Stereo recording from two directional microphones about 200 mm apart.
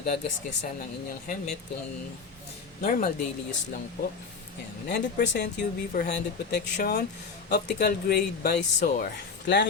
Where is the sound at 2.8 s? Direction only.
40° left (ahead or behind).